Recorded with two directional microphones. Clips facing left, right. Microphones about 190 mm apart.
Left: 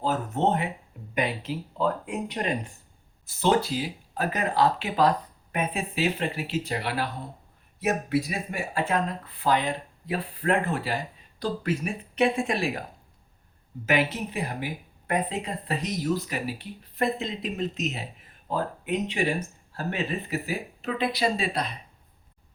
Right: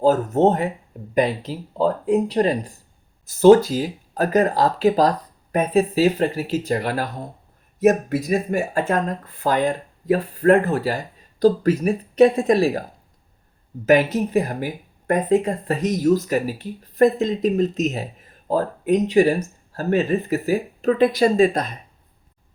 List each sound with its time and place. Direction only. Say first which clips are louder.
0.0 s speech: right 9 dB; 40° right (ahead or behind)
13.8 s speech: right 9 dB; 45° right (ahead or behind)